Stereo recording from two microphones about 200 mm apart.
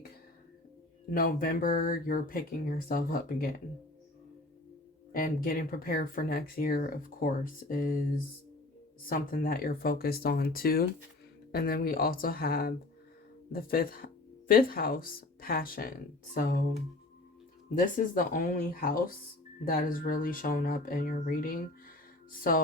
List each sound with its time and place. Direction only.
1.1 s speech: 45° left (ahead or behind)
5.1 s speech: 45° left (ahead or behind)
9.0 s speech: 45° left (ahead or behind)
17.7 s speech: 40° left (ahead or behind)